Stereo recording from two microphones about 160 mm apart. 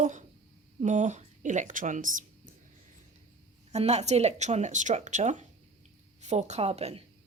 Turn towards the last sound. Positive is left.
turn(degrees=-40)  # may be behind; listen again after turning